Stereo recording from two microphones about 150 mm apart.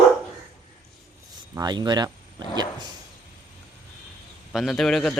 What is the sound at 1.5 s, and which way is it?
Speech, 30° right (ahead or behind).